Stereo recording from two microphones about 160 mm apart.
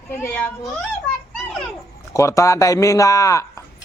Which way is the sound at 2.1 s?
20° left (ahead or behind).